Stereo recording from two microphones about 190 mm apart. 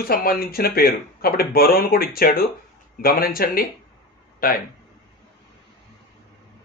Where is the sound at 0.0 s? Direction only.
50° left (ahead or behind).